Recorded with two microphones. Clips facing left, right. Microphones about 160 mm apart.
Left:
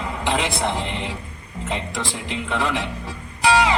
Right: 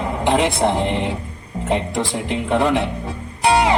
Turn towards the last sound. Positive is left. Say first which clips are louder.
# right 2 dB
turn(degrees=-50)  # may be behind; listen again after turning